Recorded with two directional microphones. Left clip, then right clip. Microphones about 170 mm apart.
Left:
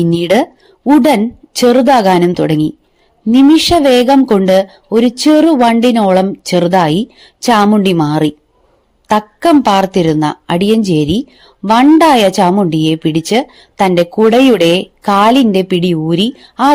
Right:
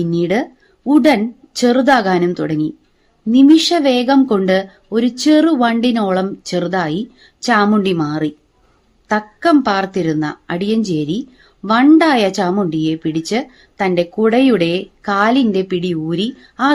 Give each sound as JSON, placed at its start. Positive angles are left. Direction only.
{"t": 0.0, "sound": "a woman's voice", "side_deg": 40}